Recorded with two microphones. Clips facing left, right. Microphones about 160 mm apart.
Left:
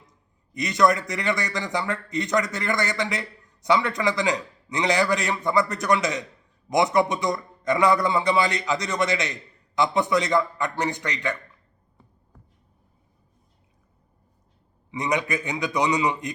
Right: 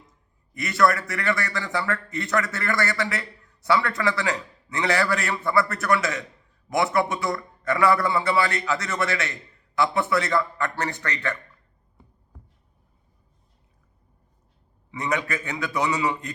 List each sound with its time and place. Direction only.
0.5 s a man's voice: 20° left (ahead or behind)
14.8 s a man's voice: 15° left (ahead or behind)